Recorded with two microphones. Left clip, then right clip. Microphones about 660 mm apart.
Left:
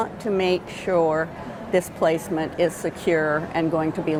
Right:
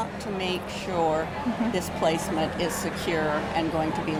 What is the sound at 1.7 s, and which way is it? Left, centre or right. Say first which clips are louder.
A woman's voice: left 7 dB; left.